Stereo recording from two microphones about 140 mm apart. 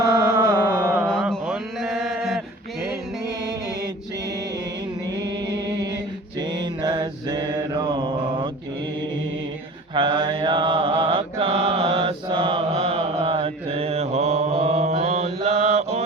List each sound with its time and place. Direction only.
0.0 s music: 25° right (ahead or behind)
1.5 s mantra: 5° right (ahead or behind)
5.0 s music: 30° right (ahead or behind)
6.4 s mantra: 30° right (ahead or behind)
9.9 s mantra: 35° right (ahead or behind); by 16.0 s 50° right (ahead or behind)